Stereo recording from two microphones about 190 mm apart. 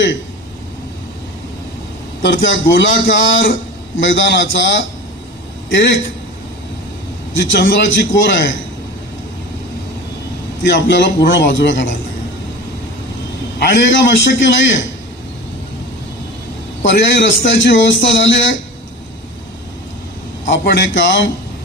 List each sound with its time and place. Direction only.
2.2 s a man's voice: 75° left (ahead or behind)
7.5 s a man's voice: 75° left (ahead or behind)
10.6 s a man's voice: 75° left (ahead or behind)
13.6 s a man's voice: 70° left (ahead or behind)
16.8 s a man's voice: 75° left (ahead or behind)
20.5 s a man's voice: 75° left (ahead or behind)